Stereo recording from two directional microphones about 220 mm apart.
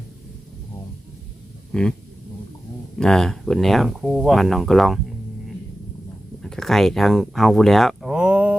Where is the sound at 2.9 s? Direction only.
Centre (ahead or behind).